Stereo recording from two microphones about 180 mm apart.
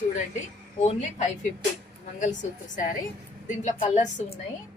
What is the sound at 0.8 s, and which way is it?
A woman's voice, 40° left (ahead or behind).